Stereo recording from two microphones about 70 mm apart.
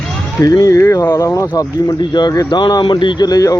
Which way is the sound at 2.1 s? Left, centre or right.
Left.